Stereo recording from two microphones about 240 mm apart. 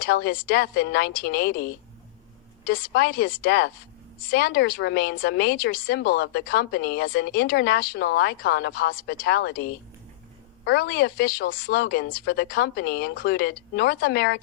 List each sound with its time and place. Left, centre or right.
0.0 s a woman's voice: left